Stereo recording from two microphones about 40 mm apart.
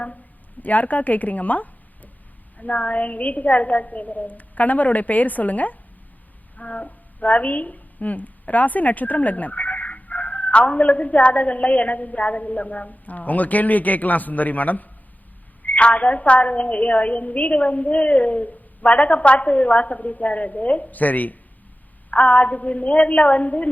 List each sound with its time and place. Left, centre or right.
0.6 s speech: left